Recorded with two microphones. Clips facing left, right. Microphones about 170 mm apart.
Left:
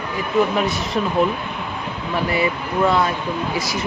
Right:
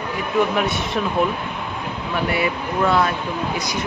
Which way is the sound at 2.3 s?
Centre (ahead or behind).